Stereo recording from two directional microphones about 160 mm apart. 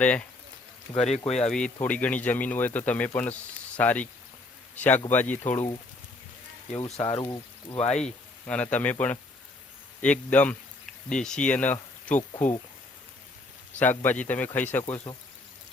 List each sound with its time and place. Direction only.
0.0 s speech: 10° left (ahead or behind)
1.0 s speech: 45° left (ahead or behind)
1.5 s speech: 5° left (ahead or behind)
6.7 s speech: 20° left (ahead or behind)
7.8 s speech: 45° left (ahead or behind)
8.4 s speech: 10° left (ahead or behind)
13.7 s speech: 10° left (ahead or behind)